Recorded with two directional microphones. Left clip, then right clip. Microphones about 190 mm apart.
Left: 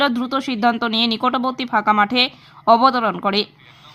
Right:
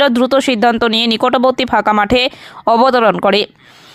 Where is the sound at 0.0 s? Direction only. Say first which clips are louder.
Right 8 dB; 45° right (ahead or behind).